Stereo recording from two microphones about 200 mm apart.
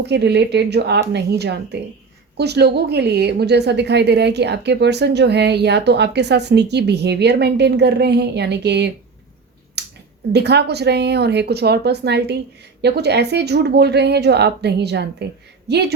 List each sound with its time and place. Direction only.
0.0 s a woman's voice: 60° right (ahead or behind)
9.8 s a sound: 55° right (ahead or behind)
10.3 s a woman's voice: 55° right (ahead or behind)